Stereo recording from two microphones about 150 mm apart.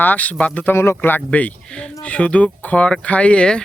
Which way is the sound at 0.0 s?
10° left (ahead or behind).